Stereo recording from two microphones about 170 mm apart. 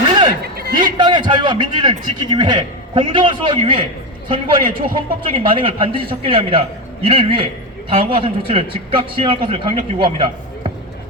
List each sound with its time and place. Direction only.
0.4 s a sound: 65° right (ahead or behind)
0.9 s a man's voice: 25° right (ahead or behind)
4.6 s a man's voice: 55° right (ahead or behind)
4.9 s a man's voice: 30° right (ahead or behind)